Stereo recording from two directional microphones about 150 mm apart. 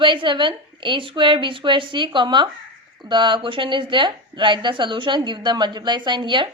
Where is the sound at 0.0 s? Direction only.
35° right (ahead or behind).